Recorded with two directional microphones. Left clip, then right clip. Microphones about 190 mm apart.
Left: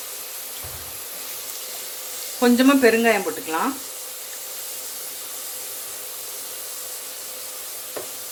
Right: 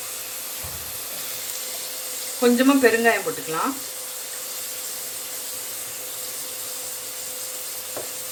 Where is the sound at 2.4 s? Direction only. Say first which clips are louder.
Left 1 dB; 45° left (ahead or behind).